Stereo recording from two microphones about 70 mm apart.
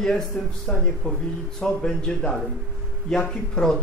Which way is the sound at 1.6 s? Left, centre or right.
Centre.